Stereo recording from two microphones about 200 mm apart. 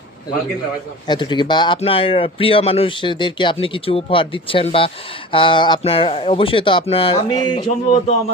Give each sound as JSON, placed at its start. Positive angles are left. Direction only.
{"t": 1.0, "sound": "speech", "side_deg": 20}